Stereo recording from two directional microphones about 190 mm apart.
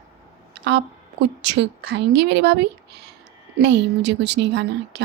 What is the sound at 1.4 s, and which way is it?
A woman's voice, 65° right (ahead or behind).